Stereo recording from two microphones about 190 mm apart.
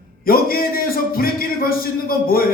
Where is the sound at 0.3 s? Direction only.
50° left (ahead or behind).